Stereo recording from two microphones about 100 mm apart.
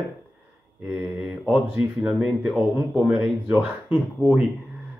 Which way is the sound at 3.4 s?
25° right (ahead or behind).